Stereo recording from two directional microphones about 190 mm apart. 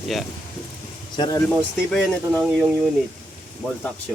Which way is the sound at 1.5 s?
Centre (ahead or behind).